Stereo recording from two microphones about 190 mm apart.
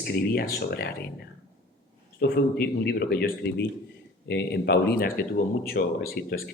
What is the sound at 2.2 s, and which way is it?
A man's voice, 55° left (ahead or behind).